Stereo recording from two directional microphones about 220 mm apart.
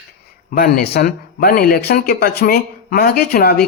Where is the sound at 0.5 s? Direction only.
45° left (ahead or behind).